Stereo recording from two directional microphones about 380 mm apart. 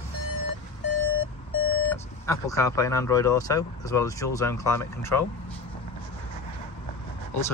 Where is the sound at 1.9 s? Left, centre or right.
Centre.